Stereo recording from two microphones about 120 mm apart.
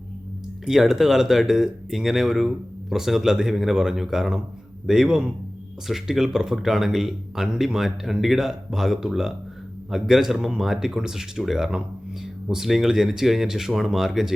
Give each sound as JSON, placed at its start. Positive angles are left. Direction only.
{"t": 0.6, "sound": "speech", "side_deg": -5}